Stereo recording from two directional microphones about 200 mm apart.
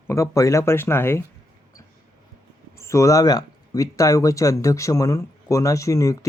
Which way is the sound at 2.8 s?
15° left (ahead or behind).